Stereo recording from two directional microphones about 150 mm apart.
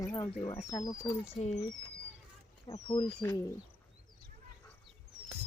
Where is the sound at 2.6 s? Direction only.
30° left (ahead or behind).